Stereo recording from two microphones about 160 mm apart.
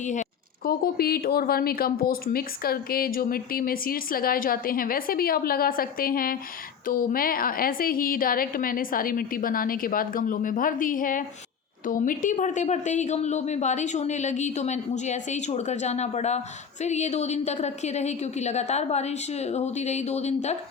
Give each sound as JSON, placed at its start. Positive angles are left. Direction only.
{"t": 0.0, "sound": "speech", "side_deg": 50}
{"t": 0.6, "sound": "a woman's voice", "side_deg": 75}